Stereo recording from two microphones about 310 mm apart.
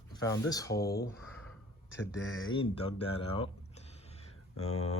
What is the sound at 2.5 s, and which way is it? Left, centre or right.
Speech, centre.